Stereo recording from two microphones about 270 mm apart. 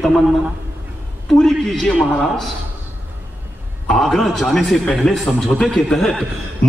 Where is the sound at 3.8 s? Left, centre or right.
Centre.